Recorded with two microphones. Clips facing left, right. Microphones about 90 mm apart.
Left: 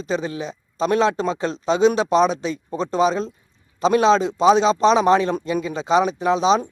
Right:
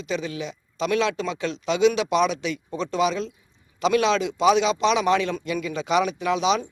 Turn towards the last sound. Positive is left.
turn(degrees=30)  # may be behind; listen again after turning